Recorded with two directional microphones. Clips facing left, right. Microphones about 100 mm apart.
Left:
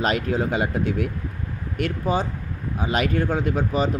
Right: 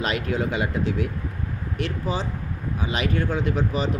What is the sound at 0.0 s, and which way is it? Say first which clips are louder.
Speech: left 3 dB; 40° left (ahead or behind).